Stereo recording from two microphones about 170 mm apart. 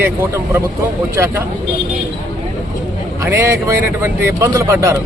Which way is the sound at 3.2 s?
15° right (ahead or behind).